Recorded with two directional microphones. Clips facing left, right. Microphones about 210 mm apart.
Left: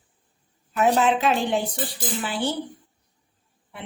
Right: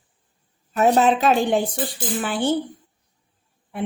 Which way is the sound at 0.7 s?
40° right (ahead or behind).